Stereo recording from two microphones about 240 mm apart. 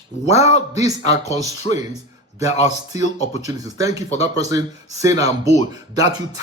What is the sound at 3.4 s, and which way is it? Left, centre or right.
Speech, centre.